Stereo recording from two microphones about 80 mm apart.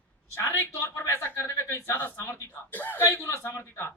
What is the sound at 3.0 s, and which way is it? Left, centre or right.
Speech, left.